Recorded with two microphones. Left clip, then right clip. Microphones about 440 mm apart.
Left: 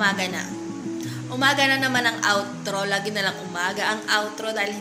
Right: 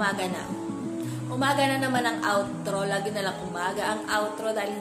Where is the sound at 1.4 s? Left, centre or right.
Right.